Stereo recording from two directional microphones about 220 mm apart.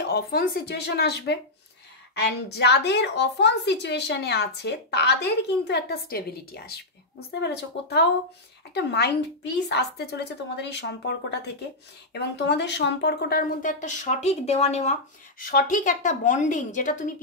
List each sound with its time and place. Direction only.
0.0 s a woman's voice: 45° left (ahead or behind)